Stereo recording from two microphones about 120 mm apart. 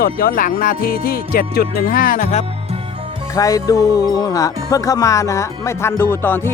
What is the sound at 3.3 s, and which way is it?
Music, 30° left (ahead or behind).